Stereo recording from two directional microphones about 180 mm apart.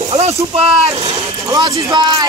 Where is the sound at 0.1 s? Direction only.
35° right (ahead or behind).